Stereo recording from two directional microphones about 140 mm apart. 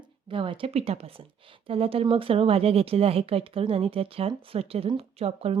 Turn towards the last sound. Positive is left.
turn(degrees=-45)  # may be behind; listen again after turning